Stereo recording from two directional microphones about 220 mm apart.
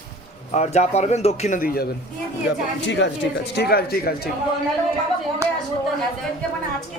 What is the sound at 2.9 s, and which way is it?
Speech, 55° left (ahead or behind).